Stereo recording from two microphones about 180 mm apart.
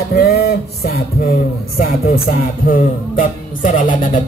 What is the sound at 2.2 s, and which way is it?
Speech, 50° left (ahead or behind).